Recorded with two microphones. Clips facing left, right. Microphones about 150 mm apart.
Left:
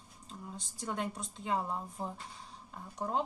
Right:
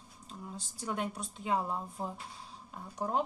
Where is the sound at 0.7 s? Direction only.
10° right (ahead or behind).